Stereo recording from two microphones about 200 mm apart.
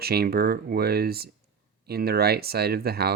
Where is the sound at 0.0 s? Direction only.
50° right (ahead or behind).